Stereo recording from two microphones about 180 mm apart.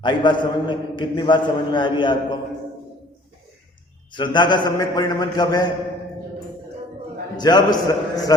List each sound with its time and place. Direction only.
0.0 s a man's voice: 25° left (ahead or behind)
4.1 s a man's voice: 25° left (ahead or behind)
7.3 s a man's voice: 25° left (ahead or behind)